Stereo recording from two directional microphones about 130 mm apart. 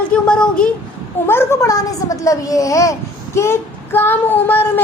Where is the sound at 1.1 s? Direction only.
20° left (ahead or behind).